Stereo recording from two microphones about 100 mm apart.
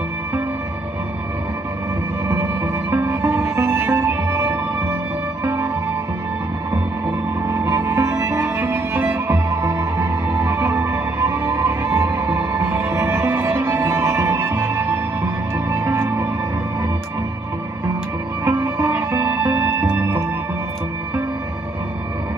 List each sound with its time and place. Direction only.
2.2 s music: 25° right (ahead or behind)
7.4 s music: 30° right (ahead or behind); by 9.2 s 15° right (ahead or behind)
9.3 s music: 30° right (ahead or behind)
18.4 s music: 25° right (ahead or behind)